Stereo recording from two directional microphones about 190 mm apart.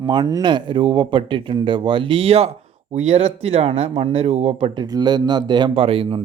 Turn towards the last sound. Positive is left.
turn(degrees=-30)  # may be behind; listen again after turning